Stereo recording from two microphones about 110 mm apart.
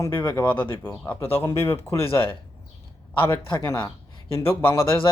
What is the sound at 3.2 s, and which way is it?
A man's voice, 25° left (ahead or behind).